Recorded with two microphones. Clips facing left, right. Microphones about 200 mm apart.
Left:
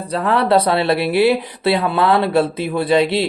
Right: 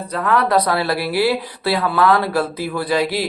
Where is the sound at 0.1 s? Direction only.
30° left (ahead or behind).